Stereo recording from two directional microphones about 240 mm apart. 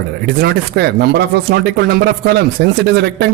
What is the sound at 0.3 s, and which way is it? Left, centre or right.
Speech, right.